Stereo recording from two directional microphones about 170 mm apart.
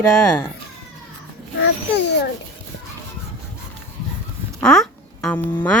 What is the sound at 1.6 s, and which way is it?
Speech, 85° left.